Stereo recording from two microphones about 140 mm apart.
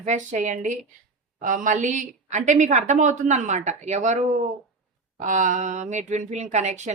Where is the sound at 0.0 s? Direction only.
60° right (ahead or behind).